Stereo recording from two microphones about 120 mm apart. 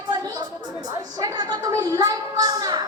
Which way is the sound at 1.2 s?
35° right (ahead or behind).